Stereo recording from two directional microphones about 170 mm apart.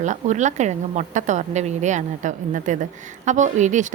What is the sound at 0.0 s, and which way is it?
A woman's voice, 45° right (ahead or behind).